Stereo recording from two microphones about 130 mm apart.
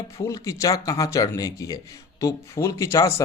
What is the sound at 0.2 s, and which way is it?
Speech, 25° left (ahead or behind).